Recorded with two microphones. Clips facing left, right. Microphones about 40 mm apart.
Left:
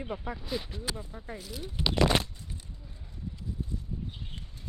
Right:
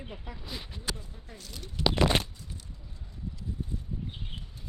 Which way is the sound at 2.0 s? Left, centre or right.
Centre.